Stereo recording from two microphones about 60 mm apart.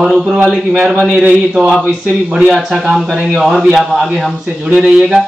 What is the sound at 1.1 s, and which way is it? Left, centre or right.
A man's voice, centre.